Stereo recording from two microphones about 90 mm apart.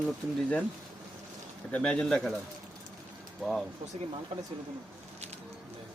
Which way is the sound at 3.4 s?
Centre (ahead or behind).